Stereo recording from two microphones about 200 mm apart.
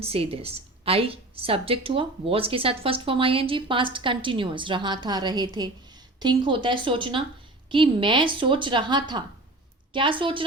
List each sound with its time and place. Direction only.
0.0 s a woman's voice: 30° right (ahead or behind)